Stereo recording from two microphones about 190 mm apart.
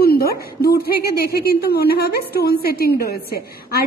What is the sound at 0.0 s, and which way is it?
A woman's voice, 55° left (ahead or behind).